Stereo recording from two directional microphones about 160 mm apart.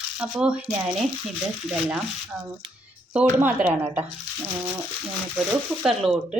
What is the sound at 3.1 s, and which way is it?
Speech, 10° right (ahead or behind).